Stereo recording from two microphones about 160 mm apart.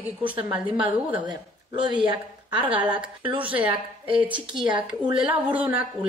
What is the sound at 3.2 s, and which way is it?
Speech, 35° right (ahead or behind).